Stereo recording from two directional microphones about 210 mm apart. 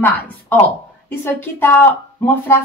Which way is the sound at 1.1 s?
10° left (ahead or behind).